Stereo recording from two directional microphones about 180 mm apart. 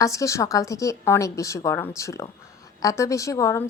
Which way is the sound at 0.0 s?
15° left (ahead or behind).